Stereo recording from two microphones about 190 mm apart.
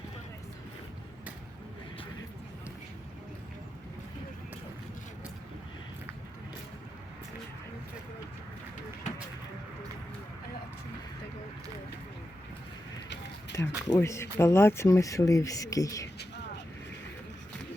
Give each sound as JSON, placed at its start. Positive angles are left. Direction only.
{"t": 13.5, "sound": "speech", "side_deg": 15}